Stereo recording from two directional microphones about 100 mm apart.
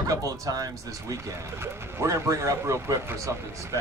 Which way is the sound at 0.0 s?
35° right (ahead or behind).